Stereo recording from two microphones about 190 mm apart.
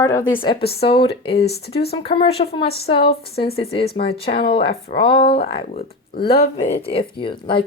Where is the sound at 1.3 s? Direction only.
60° left (ahead or behind).